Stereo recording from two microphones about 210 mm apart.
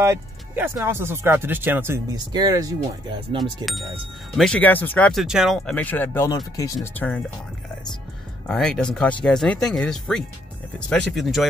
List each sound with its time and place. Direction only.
0.0 s speech: 10° right (ahead or behind)
4.4 s speech: 5° left (ahead or behind)
8.5 s speech: 5° left (ahead or behind)